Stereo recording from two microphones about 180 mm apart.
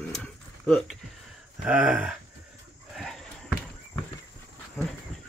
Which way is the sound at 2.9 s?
Centre (ahead or behind).